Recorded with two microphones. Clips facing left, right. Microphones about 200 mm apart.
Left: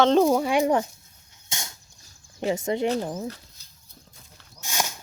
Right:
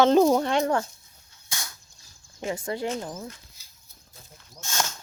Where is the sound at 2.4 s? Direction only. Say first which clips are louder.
Left 5 dB; 25° left (ahead or behind).